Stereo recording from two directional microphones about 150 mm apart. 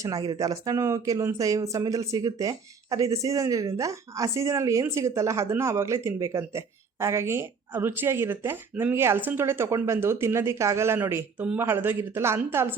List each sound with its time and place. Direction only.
0.0 s speech: 25° right (ahead or behind)